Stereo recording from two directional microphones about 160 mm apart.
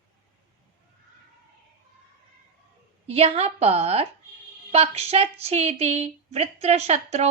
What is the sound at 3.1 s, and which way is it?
A woman's voice, 40° right (ahead or behind).